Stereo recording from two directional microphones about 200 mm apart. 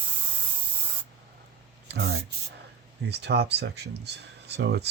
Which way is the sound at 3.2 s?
55° right (ahead or behind).